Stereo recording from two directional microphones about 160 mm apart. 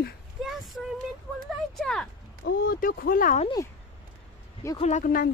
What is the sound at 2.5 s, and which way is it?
Speech, 65° left (ahead or behind).